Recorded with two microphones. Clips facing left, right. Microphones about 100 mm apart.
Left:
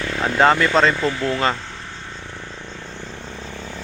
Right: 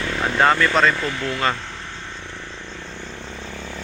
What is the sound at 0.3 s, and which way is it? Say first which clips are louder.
Speech: left 2 dB; 20° left (ahead or behind).